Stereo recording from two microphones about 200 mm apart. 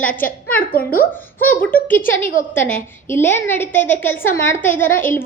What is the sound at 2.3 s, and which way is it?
Speech, 40° left (ahead or behind).